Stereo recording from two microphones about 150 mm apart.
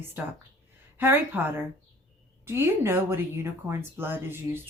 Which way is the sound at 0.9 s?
15° right (ahead or behind).